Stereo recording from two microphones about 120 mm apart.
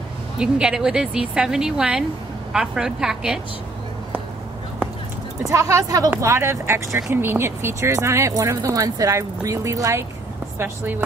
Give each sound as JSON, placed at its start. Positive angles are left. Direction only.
{"t": 0.4, "sound": "a woman's voice", "side_deg": -5}
{"t": 5.5, "sound": "speech", "side_deg": -25}